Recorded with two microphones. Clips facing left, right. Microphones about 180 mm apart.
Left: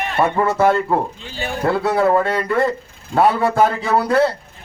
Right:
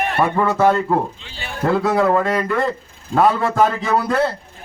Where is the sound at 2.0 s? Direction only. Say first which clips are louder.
Even; 5° left (ahead or behind).